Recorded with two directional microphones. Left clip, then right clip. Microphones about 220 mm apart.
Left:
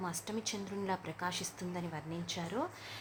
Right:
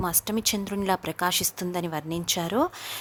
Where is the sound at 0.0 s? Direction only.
45° right (ahead or behind).